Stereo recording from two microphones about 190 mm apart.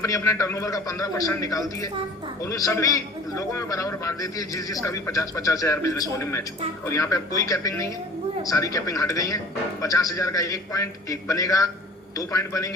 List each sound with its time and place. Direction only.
0.0 s a man's voice: 15° left (ahead or behind)